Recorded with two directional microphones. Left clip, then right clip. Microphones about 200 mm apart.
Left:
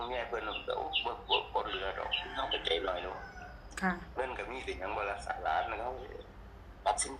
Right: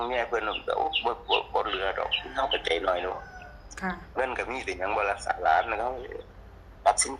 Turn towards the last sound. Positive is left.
turn(degrees=-50)  # may be behind; listen again after turning